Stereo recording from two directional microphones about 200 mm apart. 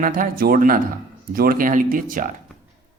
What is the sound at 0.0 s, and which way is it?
A man's voice, 45° right (ahead or behind).